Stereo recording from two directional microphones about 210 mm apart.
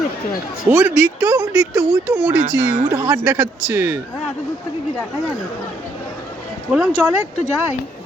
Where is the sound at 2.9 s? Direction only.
15° right (ahead or behind).